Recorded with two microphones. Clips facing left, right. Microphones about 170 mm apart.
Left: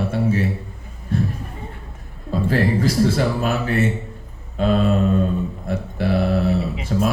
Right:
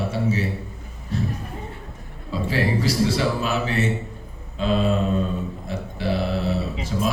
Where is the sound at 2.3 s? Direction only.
50° left (ahead or behind).